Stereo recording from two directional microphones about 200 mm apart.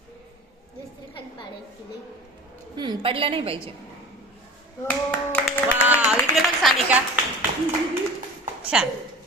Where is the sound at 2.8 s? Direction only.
25° right (ahead or behind).